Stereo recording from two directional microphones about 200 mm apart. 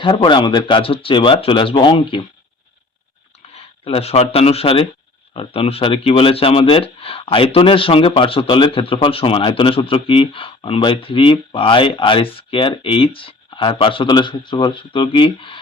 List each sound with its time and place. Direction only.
0.0 s speech: 25° left (ahead or behind)
3.5 s speech: 30° left (ahead or behind)